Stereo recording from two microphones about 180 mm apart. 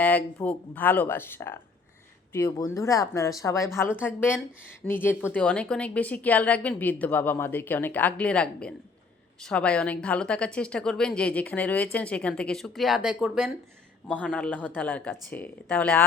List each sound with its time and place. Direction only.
0.0 s a woman's voice: 10° left (ahead or behind)